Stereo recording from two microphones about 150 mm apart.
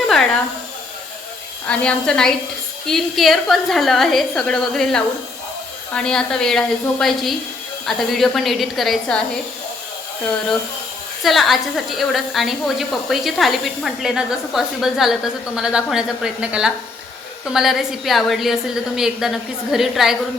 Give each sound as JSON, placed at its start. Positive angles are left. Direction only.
{"t": 1.6, "sound": "a woman's voice", "side_deg": 5}
{"t": 11.2, "sound": "a woman's voice", "side_deg": 0}